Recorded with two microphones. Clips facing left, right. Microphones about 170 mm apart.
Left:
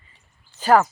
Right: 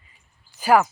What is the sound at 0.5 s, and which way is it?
Speech, 10° right (ahead or behind).